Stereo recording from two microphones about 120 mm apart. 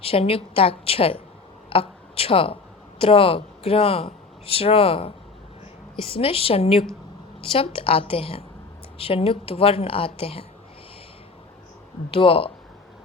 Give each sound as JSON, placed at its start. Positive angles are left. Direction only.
{"t": 0.0, "sound": "a woman's voice", "side_deg": 50}
{"t": 12.1, "sound": "a woman's voice", "side_deg": 50}